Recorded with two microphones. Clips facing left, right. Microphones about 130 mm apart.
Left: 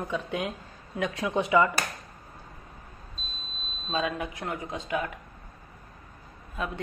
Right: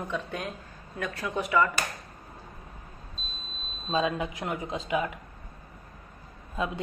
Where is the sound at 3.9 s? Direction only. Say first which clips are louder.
Right 2 dB; 25° right (ahead or behind).